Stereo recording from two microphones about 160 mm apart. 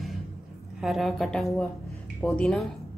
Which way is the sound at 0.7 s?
Centre (ahead or behind).